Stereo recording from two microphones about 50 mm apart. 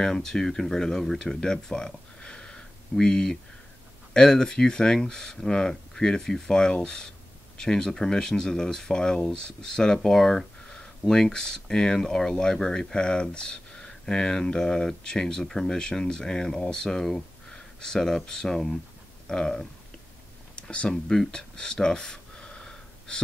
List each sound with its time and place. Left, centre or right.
0.0 s speech: centre
20.5 s a sound: left
21.1 s gasp: centre